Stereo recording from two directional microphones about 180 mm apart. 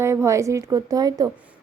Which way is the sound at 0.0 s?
15° right (ahead or behind).